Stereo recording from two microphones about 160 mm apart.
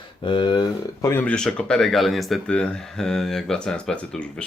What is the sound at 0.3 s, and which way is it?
Speech, 30° left (ahead or behind).